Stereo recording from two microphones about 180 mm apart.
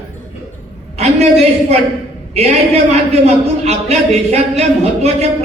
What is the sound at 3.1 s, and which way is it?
Speech, 35° right (ahead or behind).